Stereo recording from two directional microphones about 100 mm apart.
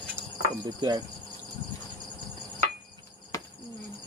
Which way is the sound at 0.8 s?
45° right (ahead or behind).